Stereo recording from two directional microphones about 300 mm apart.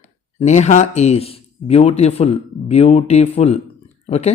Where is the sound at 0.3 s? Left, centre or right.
Left.